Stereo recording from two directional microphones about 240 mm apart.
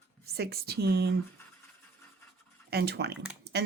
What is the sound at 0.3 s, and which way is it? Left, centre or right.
Speech, right.